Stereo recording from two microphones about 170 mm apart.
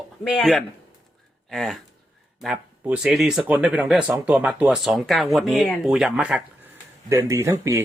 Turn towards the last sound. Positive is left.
turn(degrees=-15)  # may be behind; listen again after turning